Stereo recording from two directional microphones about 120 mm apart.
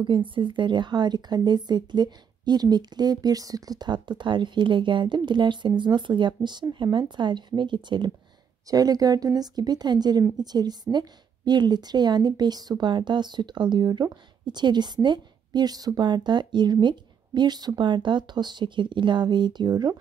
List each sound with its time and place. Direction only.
0.0 s speech: 45° right (ahead or behind)